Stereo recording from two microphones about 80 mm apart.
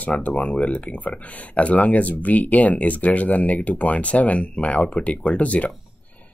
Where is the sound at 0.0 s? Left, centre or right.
Centre.